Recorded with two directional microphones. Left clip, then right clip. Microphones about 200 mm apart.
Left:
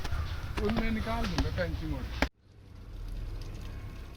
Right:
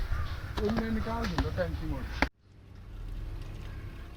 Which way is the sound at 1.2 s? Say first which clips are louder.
Right 1 dB; centre (ahead or behind).